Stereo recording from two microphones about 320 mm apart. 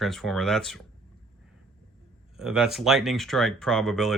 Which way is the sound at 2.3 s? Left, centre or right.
Centre.